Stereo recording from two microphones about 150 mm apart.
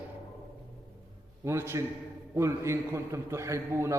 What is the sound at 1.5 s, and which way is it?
A man's voice, 15° right (ahead or behind).